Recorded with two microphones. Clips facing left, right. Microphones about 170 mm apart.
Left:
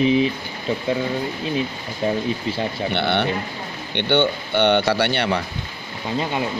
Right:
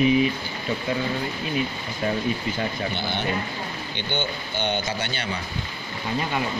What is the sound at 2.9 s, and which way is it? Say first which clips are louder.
Speech: left 6 dB; 70° left (ahead or behind).